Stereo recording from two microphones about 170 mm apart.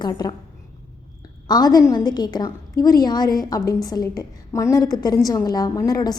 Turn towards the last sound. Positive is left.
turn(degrees=20)  # may be behind; listen again after turning